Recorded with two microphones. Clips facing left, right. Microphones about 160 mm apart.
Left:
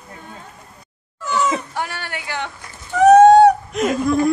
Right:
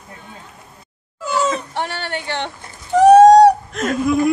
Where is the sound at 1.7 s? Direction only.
30° right (ahead or behind).